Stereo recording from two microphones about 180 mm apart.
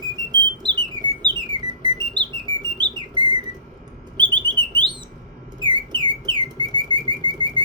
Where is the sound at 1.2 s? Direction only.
25° right (ahead or behind).